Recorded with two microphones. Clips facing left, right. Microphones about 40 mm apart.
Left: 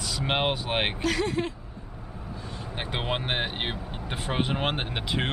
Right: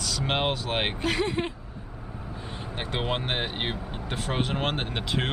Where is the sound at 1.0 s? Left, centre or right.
Right.